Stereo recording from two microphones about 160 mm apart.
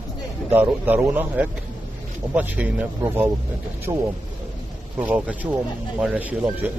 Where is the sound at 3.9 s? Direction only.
25° right (ahead or behind).